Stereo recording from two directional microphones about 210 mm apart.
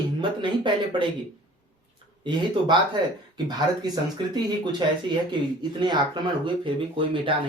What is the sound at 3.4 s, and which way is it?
Speech, 20° right (ahead or behind).